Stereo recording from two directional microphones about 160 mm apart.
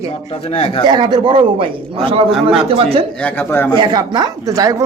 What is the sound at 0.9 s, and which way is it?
Speech, 25° right (ahead or behind).